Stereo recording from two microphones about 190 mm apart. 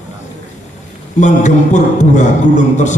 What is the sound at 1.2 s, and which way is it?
A man's voice, 40° left (ahead or behind).